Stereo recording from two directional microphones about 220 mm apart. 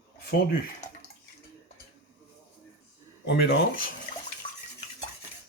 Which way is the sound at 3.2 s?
50° left (ahead or behind).